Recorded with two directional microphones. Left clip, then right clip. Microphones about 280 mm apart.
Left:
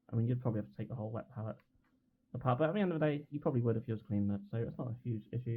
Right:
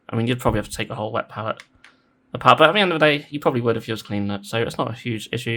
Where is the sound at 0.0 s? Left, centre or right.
Right.